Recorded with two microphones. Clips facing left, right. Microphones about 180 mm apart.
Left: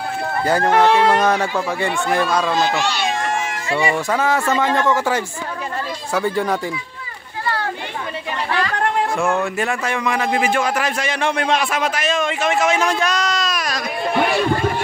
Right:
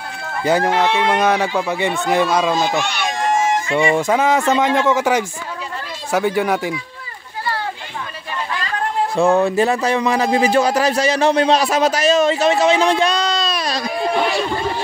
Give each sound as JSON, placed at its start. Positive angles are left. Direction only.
{"t": 0.7, "sound": "speech", "side_deg": 50}
{"t": 1.2, "sound": "speech", "side_deg": -15}
{"t": 2.8, "sound": "speech", "side_deg": -55}
{"t": 3.2, "sound": "a sound", "side_deg": 65}
{"t": 3.6, "sound": "speech", "side_deg": -20}
{"t": 8.5, "sound": "a sound", "side_deg": 65}
{"t": 9.1, "sound": "speech", "side_deg": -35}